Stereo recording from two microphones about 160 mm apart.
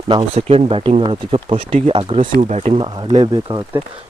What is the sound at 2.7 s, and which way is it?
Speech, 35° right (ahead or behind).